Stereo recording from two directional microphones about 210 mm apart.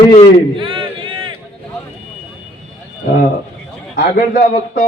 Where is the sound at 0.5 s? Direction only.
25° right (ahead or behind).